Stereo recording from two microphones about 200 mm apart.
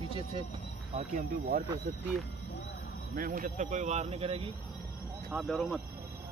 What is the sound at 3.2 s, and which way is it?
Speech, 45° right (ahead or behind).